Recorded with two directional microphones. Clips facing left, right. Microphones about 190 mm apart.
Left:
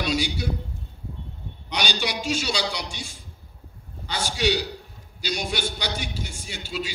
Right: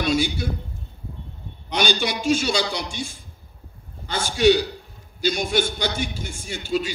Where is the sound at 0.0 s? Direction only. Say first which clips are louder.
Right 4 dB; 50° right (ahead or behind).